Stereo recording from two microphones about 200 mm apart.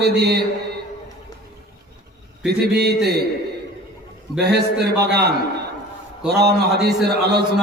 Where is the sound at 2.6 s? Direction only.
55° right (ahead or behind).